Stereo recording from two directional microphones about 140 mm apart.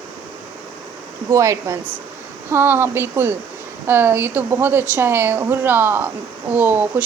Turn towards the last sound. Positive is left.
turn(degrees=-10)  # may be behind; listen again after turning